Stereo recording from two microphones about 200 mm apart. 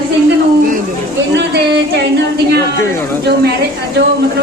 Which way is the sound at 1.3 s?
60° right (ahead or behind).